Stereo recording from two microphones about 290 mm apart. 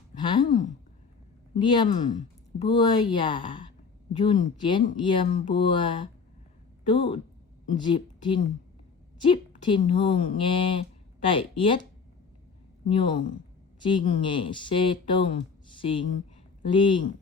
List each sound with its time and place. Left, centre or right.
0.1 s a sound: centre
1.5 s speech: centre
12.8 s speech: centre